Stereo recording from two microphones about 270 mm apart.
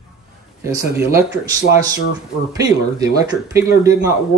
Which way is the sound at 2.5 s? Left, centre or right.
Centre.